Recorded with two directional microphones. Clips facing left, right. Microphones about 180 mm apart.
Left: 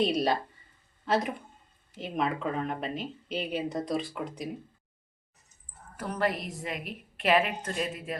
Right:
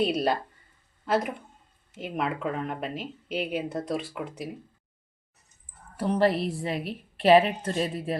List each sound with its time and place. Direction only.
0.0 s speech: 5° right (ahead or behind)
6.0 s a woman's voice: 30° right (ahead or behind)